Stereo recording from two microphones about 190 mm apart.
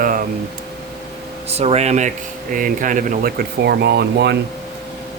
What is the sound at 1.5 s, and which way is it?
Speech, 35° right (ahead or behind).